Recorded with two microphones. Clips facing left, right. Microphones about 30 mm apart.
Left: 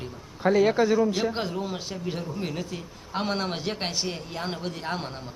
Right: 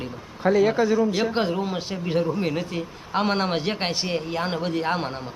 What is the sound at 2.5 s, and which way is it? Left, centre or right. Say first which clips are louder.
Speech: right 6 dB; right.